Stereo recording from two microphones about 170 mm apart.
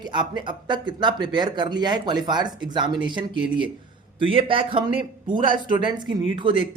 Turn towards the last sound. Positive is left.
turn(degrees=-30)  # may be behind; listen again after turning